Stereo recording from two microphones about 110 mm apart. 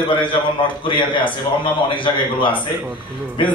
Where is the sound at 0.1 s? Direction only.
45° left (ahead or behind).